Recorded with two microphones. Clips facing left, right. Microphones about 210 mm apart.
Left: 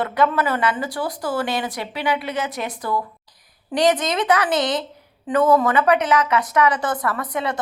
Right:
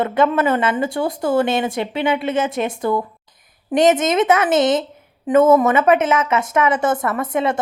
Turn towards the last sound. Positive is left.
turn(degrees=-25)  # may be behind; listen again after turning